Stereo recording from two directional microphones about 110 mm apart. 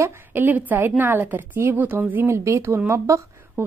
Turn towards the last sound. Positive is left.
turn(degrees=-25)  # may be behind; listen again after turning